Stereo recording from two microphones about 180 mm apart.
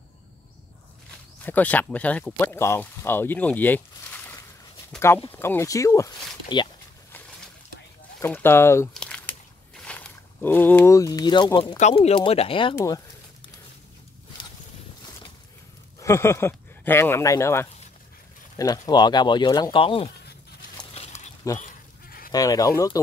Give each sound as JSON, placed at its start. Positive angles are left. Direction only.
{"t": 1.4, "sound": "speech", "side_deg": 10}
{"t": 7.1, "sound": "a sound", "side_deg": 10}
{"t": 8.2, "sound": "speech", "side_deg": 10}
{"t": 8.9, "sound": "crumpling", "side_deg": 5}
{"t": 9.8, "sound": "speech", "side_deg": 10}
{"t": 11.8, "sound": "speech", "side_deg": 35}
{"t": 12.7, "sound": "speech", "side_deg": 20}
{"t": 16.0, "sound": "speech", "side_deg": 15}
{"t": 21.5, "sound": "goat", "side_deg": 50}
{"t": 22.3, "sound": "speech", "side_deg": 20}